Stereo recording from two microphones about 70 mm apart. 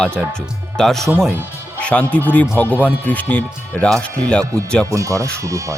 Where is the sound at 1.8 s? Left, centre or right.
Left.